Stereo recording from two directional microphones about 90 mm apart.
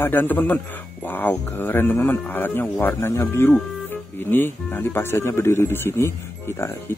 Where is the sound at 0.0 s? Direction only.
20° left (ahead or behind).